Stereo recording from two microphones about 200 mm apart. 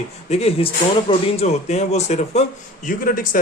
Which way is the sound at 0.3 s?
30° left (ahead or behind).